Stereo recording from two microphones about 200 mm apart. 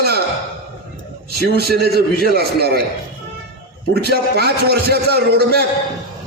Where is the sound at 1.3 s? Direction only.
55° right (ahead or behind).